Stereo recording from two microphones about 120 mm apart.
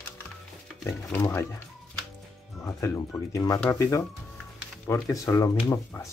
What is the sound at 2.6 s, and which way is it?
Speech, 25° left (ahead or behind).